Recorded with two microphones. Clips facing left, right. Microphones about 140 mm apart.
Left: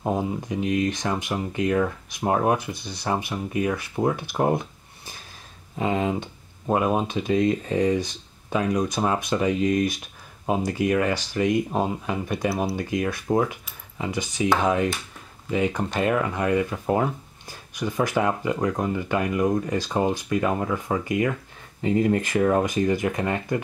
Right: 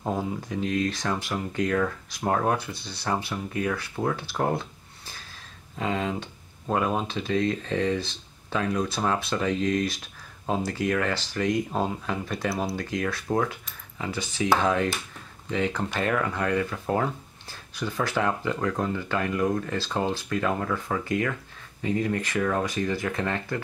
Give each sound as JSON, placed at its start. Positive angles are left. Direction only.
{"t": 0.0, "sound": "speech", "side_deg": 15}